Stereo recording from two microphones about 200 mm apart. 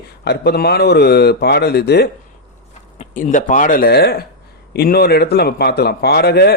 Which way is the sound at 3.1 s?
40° left (ahead or behind).